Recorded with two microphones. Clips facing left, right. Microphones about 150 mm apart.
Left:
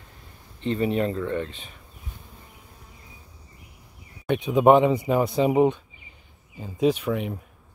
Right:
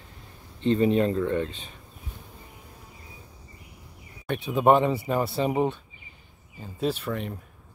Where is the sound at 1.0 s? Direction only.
15° right (ahead or behind).